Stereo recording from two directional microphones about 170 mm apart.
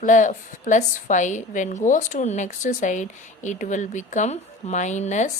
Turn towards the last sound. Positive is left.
turn(degrees=45)  # may be behind; listen again after turning